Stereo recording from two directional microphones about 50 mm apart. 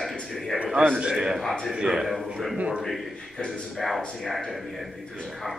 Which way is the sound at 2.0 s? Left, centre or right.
Centre.